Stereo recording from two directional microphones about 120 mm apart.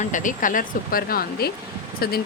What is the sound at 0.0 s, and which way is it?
Speech, 90° left.